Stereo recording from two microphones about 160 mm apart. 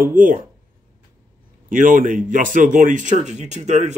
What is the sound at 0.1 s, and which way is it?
Speech, 55° right (ahead or behind).